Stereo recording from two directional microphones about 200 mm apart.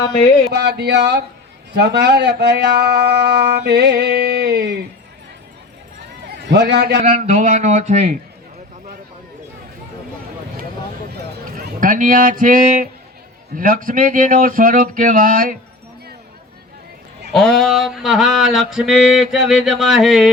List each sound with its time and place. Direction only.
0.5 s speech: 55° right (ahead or behind)
6.5 s speech: 55° right (ahead or behind)
7.0 s speech: 35° right (ahead or behind)
11.5 s a man's voice: 45° right (ahead or behind)
17.3 s a sound: centre (ahead or behind)